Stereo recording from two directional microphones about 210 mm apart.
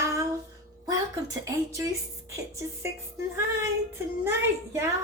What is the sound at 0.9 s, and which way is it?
A woman's voice, 15° right (ahead or behind).